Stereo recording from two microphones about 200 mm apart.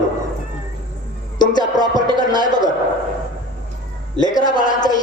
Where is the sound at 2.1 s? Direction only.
20° left (ahead or behind).